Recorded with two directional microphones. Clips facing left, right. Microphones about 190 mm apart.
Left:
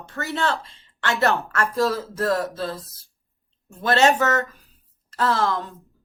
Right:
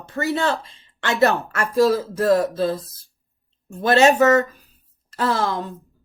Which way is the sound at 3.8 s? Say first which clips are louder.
Right 4 dB; 15° right (ahead or behind).